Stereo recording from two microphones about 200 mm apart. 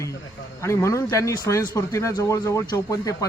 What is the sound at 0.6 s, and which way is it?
Speech, 15° left (ahead or behind).